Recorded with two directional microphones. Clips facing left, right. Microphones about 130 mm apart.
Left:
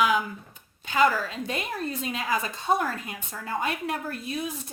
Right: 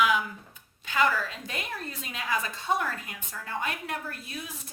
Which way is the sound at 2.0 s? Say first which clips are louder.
Left 1 dB; 25° left (ahead or behind).